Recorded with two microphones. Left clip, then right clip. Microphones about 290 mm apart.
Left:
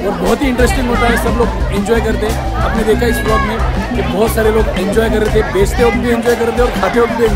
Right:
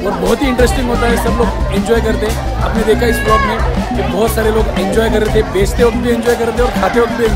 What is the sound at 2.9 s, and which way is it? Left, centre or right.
Speech, centre.